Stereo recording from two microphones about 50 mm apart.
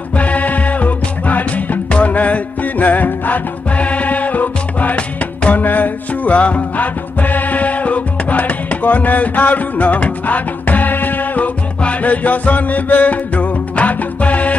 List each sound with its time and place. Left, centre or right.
0.1 s music: left